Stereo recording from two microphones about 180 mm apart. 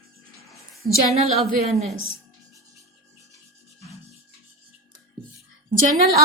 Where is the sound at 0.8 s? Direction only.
55° right (ahead or behind).